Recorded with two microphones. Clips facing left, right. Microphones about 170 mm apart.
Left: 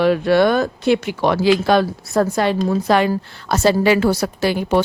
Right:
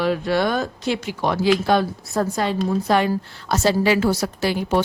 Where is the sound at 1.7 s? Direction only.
85° left.